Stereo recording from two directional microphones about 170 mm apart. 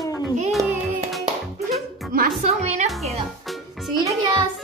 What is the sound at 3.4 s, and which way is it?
Music, centre (ahead or behind).